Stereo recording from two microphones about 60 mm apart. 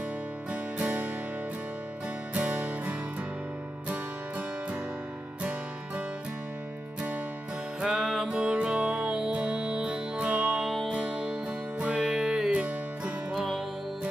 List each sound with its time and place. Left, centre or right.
0.5 s music: right
2.3 s music: right
7.8 s music: centre
8.3 s music: centre
10.6 s music: centre
10.9 s music: centre
12.5 s music: right
13.3 s music: centre